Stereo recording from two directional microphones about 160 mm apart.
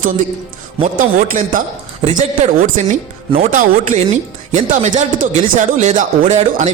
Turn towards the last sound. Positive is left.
turn(degrees=-45)  # may be behind; listen again after turning